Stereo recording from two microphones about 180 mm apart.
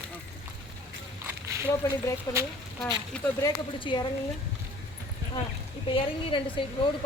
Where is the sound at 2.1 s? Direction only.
15° left (ahead or behind).